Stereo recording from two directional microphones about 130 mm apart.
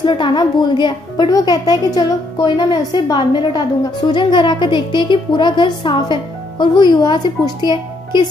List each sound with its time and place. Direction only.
0.0 s a woman's voice: 40° left (ahead or behind)